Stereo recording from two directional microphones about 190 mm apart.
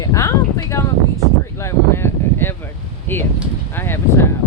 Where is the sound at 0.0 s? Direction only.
15° left (ahead or behind).